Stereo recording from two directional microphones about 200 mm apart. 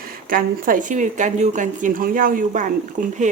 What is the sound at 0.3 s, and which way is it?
Speech, 45° right (ahead or behind).